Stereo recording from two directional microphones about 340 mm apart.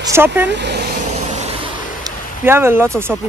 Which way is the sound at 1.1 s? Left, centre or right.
Centre.